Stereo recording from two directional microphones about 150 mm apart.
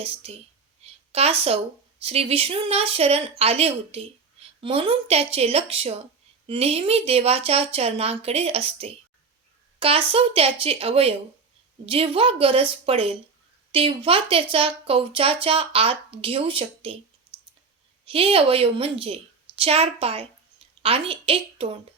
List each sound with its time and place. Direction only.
0.0 s speech: 40° right (ahead or behind)
0.8 s a sound: 45° right (ahead or behind)
2.0 s speech: 40° right (ahead or behind)
18.0 s speech: 40° right (ahead or behind)